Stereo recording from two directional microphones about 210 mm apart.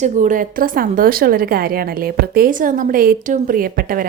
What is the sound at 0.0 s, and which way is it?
A woman's voice, 35° right (ahead or behind).